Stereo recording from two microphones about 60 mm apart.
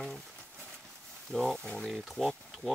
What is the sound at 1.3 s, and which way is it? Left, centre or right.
Speech, centre.